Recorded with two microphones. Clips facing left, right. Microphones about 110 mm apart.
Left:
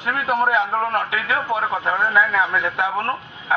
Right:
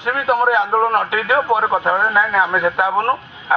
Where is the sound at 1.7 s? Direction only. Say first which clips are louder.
Right 4 dB; 35° right (ahead or behind).